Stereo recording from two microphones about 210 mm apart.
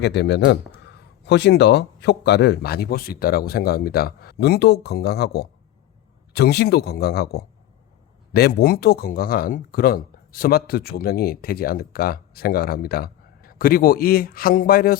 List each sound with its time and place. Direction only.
0.0 s speech: 55° left (ahead or behind)